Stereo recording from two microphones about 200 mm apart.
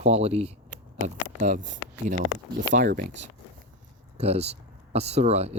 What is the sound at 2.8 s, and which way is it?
Speech, 55° right (ahead or behind).